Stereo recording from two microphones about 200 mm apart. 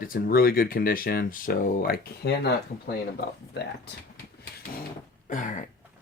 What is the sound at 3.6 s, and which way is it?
Speech, 60° left (ahead or behind).